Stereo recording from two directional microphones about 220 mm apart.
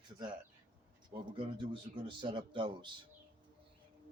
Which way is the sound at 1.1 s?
20° right (ahead or behind).